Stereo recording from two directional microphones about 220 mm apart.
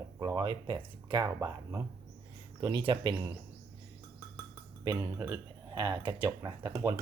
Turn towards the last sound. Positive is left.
turn(degrees=-20)  # may be behind; listen again after turning